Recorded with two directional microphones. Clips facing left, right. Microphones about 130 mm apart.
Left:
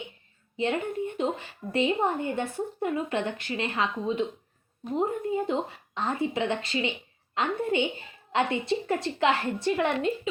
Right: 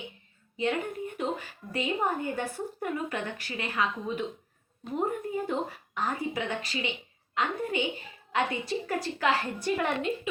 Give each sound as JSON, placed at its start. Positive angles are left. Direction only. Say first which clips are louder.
{"t": 0.5, "sound": "a woman's voice", "louder": "left 2 dB", "side_deg": 25}